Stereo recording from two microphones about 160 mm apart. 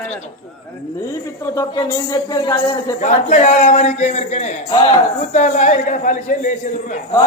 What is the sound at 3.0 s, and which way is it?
A man's voice, 50° left (ahead or behind).